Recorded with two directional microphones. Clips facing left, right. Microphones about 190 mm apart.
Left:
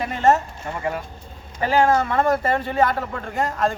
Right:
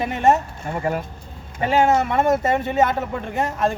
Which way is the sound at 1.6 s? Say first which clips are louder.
Right 1 dB; 25° right (ahead or behind).